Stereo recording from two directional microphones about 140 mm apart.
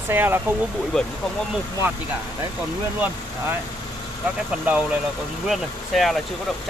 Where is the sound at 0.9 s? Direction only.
5° left (ahead or behind).